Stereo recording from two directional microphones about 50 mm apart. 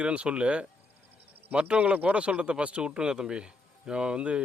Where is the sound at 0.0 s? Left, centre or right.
Right.